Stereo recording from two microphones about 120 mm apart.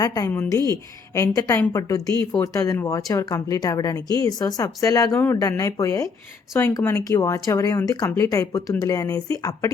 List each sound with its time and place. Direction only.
0.0 s speech: 30° left (ahead or behind)
6.7 s speech: 30° left (ahead or behind)